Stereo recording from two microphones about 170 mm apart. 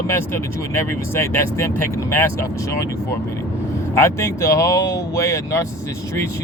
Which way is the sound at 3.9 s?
15° left (ahead or behind).